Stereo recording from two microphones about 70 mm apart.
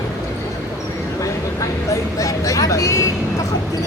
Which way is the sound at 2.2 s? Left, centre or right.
Left.